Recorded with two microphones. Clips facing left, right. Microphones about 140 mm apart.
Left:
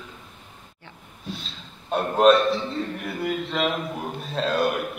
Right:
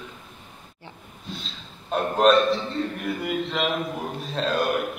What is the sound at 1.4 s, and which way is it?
A man's voice, centre (ahead or behind).